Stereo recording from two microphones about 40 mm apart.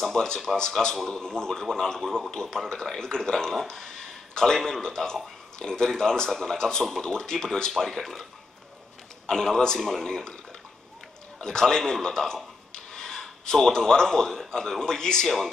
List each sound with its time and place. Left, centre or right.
0.0 s speech: centre
3.6 s a sound: centre
4.6 s speech: centre
9.3 s speech: centre
11.4 s speech: centre
12.7 s a sound: centre
14.5 s speech: centre